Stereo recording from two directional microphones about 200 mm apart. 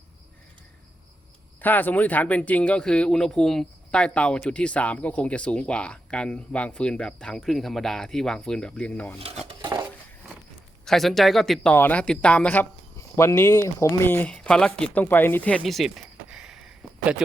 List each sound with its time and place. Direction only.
1.6 s speech: 10° left (ahead or behind)
9.5 s dishes: 20° right (ahead or behind)
10.8 s speech: centre (ahead or behind)